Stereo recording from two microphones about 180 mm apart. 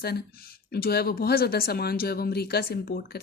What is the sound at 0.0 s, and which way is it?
Speech, 60° left (ahead or behind).